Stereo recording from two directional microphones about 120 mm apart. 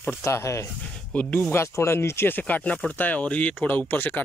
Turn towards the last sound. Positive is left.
turn(degrees=15)  # may be behind; listen again after turning